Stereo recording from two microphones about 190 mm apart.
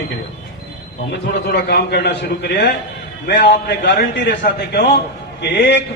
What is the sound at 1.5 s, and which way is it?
A man's voice, 55° left (ahead or behind).